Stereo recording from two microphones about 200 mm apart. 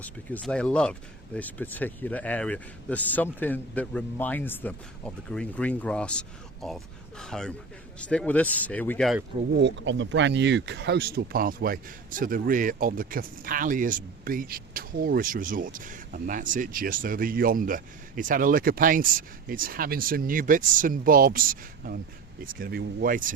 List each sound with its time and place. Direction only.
0.0 s speech: 5° left (ahead or behind)
9.6 s speech: 60° right (ahead or behind); by 23.3 s 45° right (ahead or behind)